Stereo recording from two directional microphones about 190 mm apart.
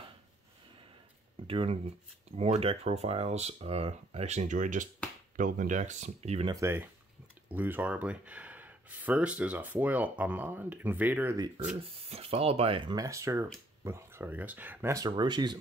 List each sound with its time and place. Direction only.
1.5 s speech: 30° right (ahead or behind)
6.5 s speech: 15° right (ahead or behind)
11.3 s speech: 20° right (ahead or behind)
11.8 s speech: 30° right (ahead or behind)